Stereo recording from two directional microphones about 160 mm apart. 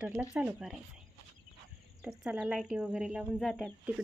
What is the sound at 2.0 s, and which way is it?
A woman's voice, 5° right (ahead or behind).